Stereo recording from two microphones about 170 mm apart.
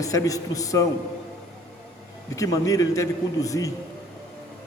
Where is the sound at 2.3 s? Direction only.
20° left (ahead or behind).